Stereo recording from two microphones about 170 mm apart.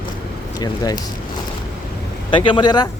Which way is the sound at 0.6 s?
20° left (ahead or behind).